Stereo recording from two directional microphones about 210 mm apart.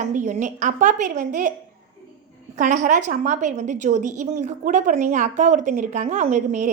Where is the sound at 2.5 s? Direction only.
40° right (ahead or behind).